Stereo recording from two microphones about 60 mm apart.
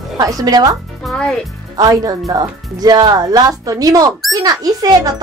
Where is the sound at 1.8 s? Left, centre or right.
Right.